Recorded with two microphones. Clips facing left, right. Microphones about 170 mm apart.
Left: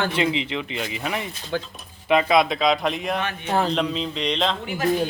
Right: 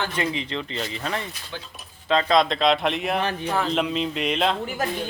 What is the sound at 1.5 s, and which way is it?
Speech, 50° left (ahead or behind).